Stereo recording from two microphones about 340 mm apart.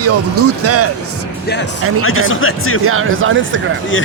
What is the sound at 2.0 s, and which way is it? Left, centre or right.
Speech, left.